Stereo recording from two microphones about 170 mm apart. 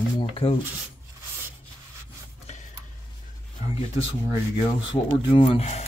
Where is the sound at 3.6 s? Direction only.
40° left (ahead or behind).